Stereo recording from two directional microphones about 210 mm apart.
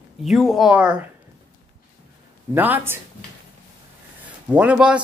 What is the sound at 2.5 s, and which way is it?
Speech, 10° right (ahead or behind).